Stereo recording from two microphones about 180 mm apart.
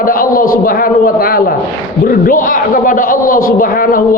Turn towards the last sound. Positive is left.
turn(degrees=50)  # may be behind; listen again after turning